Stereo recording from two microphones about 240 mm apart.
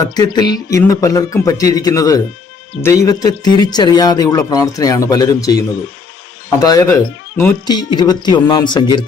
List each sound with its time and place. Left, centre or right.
0.0 s speech: centre
6.6 s speech: centre